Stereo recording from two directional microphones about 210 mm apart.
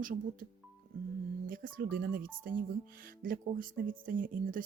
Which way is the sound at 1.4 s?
40° right (ahead or behind).